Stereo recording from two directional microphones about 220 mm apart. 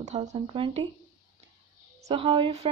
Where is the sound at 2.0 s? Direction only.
25° right (ahead or behind).